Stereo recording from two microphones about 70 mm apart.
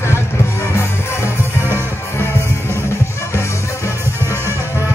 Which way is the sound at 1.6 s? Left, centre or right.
Right.